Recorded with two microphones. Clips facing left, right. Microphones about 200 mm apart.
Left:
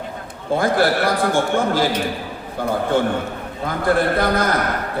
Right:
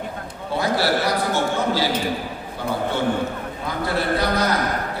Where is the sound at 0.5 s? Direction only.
50° left (ahead or behind).